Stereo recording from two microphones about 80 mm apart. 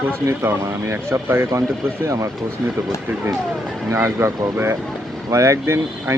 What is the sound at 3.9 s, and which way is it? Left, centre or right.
Speech, right.